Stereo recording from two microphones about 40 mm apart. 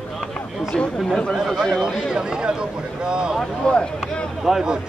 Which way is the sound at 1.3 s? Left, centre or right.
Centre.